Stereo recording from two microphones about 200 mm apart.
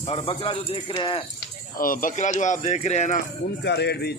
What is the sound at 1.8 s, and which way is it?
Speech, 45° left (ahead or behind).